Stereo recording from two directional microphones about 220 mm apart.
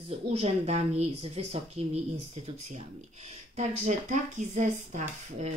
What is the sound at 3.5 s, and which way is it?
Speech, 30° right (ahead or behind).